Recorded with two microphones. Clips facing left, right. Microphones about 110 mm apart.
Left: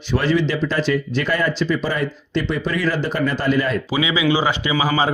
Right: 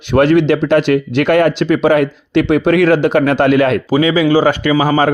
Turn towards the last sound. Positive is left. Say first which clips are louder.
# right 7 dB
turn(degrees=-50)  # may be behind; listen again after turning